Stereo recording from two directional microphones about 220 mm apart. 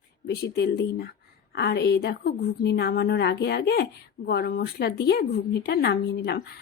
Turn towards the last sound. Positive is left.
turn(degrees=50)  # may be behind; listen again after turning